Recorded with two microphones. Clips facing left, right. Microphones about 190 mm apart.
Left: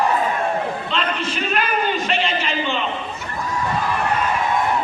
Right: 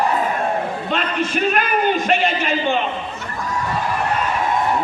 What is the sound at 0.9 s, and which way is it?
A man's voice, 50° right (ahead or behind).